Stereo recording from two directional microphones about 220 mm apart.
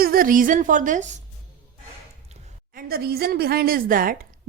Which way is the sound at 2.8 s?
45° right (ahead or behind).